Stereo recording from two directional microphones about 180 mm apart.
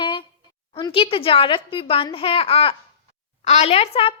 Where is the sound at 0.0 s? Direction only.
25° left (ahead or behind).